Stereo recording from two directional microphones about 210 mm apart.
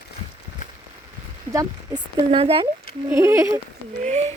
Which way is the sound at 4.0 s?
30° right (ahead or behind).